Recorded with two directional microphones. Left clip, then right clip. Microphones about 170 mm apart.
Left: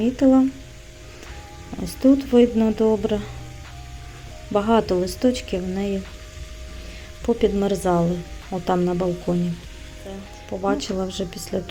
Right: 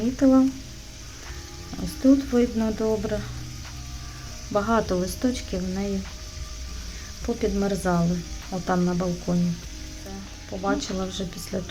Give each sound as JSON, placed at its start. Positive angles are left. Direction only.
{"t": 0.0, "sound": "speech", "side_deg": 10}
{"t": 2.0, "sound": "speech", "side_deg": 15}
{"t": 4.5, "sound": "speech", "side_deg": 15}
{"t": 7.3, "sound": "speech", "side_deg": 15}
{"t": 10.6, "sound": "speech", "side_deg": 15}